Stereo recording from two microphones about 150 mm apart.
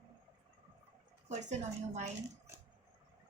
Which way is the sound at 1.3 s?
50° right (ahead or behind).